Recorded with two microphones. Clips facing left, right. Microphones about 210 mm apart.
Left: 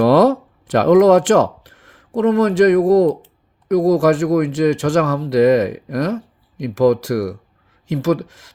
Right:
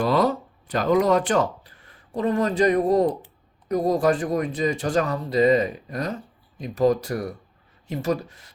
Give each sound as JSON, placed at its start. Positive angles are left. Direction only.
{"t": 0.1, "sound": "speech", "side_deg": 85}